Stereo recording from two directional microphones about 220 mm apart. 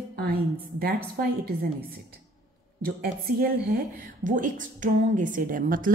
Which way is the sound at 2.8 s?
40° right (ahead or behind).